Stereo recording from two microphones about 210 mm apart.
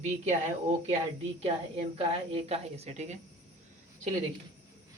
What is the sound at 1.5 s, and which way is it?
A woman's voice, 20° right (ahead or behind).